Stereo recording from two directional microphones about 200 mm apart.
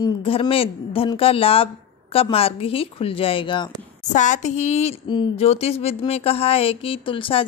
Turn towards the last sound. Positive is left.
turn(degrees=25)  # may be behind; listen again after turning